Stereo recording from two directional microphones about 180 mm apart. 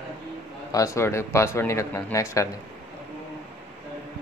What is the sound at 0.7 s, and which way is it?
Speech, 15° left (ahead or behind).